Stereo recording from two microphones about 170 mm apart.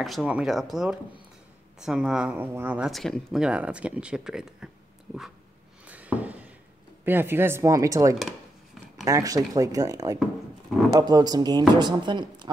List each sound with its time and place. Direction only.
0.0 s speech: centre (ahead or behind)
2.9 s speech: centre (ahead or behind)
5.9 s a sound: 10° right (ahead or behind)
7.1 s speech: 15° right (ahead or behind)